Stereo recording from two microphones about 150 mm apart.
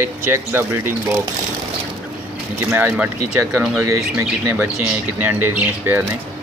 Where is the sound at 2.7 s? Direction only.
10° right (ahead or behind).